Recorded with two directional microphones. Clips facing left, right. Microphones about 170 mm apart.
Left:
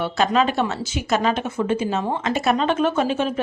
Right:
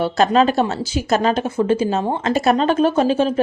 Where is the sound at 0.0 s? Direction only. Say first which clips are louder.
Right 4 dB; 40° right (ahead or behind).